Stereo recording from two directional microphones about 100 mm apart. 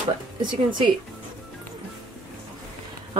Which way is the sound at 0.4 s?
50° right (ahead or behind).